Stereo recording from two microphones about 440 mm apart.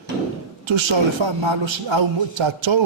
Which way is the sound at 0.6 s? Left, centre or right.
Right.